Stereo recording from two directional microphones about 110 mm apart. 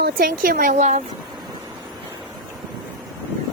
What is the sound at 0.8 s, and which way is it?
Speech, 90° right.